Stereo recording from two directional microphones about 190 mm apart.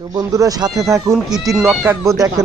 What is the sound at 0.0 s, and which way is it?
Speech, 20° right (ahead or behind).